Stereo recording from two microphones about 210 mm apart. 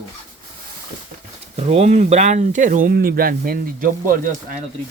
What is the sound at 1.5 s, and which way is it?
Speech, 30° right (ahead or behind).